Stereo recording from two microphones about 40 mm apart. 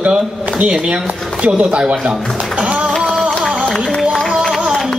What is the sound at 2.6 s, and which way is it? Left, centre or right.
Music, right.